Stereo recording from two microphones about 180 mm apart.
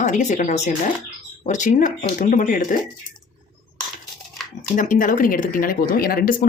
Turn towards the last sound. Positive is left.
turn(degrees=50)  # may be behind; listen again after turning